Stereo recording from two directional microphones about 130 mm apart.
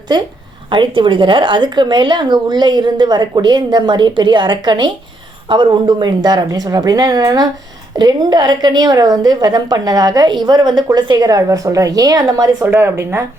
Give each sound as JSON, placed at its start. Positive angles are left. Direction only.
{"t": 0.1, "sound": "a woman's voice", "side_deg": -35}